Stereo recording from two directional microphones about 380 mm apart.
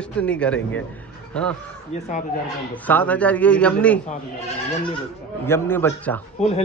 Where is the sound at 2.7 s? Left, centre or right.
Centre.